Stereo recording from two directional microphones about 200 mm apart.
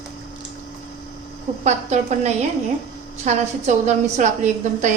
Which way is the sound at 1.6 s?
35° right (ahead or behind).